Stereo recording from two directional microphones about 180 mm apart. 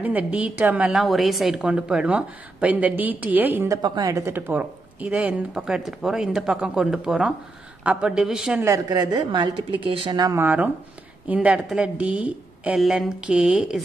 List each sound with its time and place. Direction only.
0.0 s a woman's voice: 10° right (ahead or behind)
8.6 s a woman's voice: 20° right (ahead or behind); by 13.8 s 5° right (ahead or behind)